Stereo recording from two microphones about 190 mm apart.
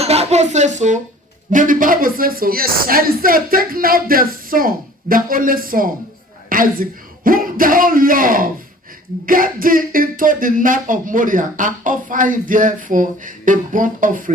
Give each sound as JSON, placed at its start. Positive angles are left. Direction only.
{"t": 0.0, "sound": "a woman's voice", "side_deg": -35}